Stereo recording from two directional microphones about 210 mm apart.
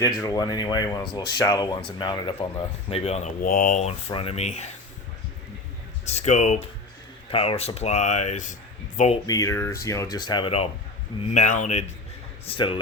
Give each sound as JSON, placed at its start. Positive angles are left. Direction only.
{"t": 0.0, "sound": "speech", "side_deg": 15}
{"t": 6.1, "sound": "speech", "side_deg": 30}
{"t": 9.2, "sound": "speech", "side_deg": 15}